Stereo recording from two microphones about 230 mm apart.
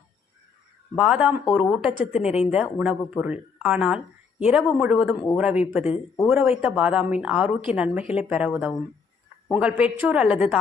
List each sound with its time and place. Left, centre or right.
0.9 s a woman's voice: centre